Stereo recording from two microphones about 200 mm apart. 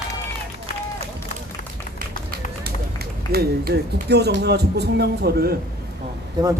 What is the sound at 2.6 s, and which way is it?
A man's voice, 50° right (ahead or behind).